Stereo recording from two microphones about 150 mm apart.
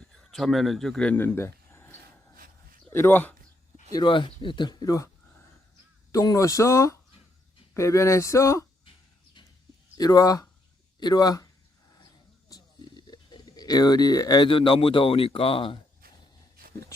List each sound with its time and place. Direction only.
0.0 s speech: centre (ahead or behind)
2.3 s dog: 70° right (ahead or behind)
2.9 s speech: 15° left (ahead or behind)
3.9 s speech: 30° left (ahead or behind)
6.1 s speech: 20° left (ahead or behind)
10.0 s speech: 25° left (ahead or behind)
12.5 s speech: 25° left (ahead or behind)